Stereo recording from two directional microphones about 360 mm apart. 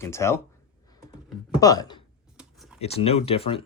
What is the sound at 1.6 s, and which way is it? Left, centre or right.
Speech, centre.